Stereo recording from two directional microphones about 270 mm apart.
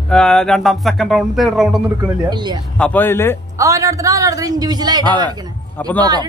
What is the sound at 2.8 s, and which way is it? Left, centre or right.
Speech, centre.